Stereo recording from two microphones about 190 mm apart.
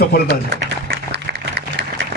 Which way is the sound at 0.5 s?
70° right (ahead or behind).